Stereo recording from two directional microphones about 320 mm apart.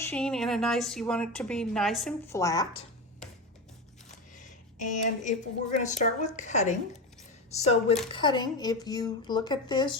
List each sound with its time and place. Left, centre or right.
0.0 s a woman's voice: centre
4.4 s a sound: left
5.8 s a woman's voice: left